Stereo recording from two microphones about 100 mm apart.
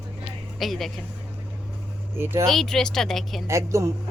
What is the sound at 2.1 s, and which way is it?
Speech, 25° right (ahead or behind).